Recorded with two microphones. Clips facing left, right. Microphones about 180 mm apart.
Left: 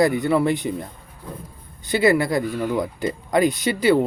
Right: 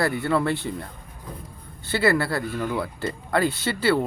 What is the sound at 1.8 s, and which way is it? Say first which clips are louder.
Speech: left 4 dB; 15° left (ahead or behind).